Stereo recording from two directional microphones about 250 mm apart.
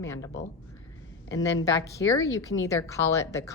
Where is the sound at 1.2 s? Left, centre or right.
Left.